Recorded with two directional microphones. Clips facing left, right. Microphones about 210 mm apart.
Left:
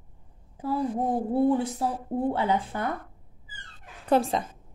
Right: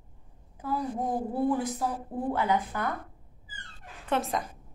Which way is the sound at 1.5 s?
30° left (ahead or behind).